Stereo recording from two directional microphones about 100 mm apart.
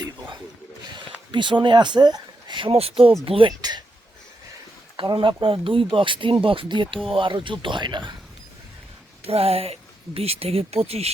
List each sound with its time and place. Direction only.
0.9 s speech: 50° right (ahead or behind)
5.0 s speech: 70° right (ahead or behind); by 8.1 s 50° right (ahead or behind)
9.2 s speech: 85° right